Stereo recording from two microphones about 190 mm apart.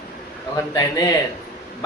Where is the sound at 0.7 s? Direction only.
20° left (ahead or behind).